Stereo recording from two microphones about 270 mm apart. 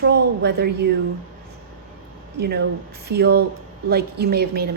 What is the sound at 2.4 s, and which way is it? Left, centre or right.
A woman's voice, right.